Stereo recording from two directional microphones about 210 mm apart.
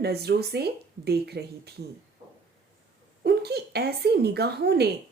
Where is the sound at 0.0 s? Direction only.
50° right (ahead or behind).